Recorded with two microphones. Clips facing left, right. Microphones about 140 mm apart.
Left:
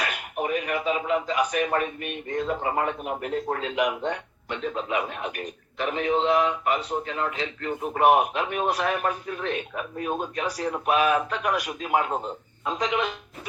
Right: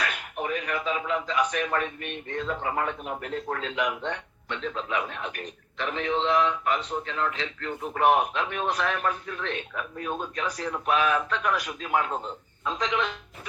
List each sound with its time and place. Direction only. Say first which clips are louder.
0.0 s a sound: left 2 dB; 10° left (ahead or behind)
1.3 s speech: left 2 dB; 10° left (ahead or behind)
2.5 s a man's voice: left 2 dB; 20° left (ahead or behind)